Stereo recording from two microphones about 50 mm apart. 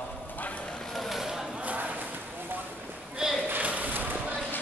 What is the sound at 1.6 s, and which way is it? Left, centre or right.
Clip-clop, right.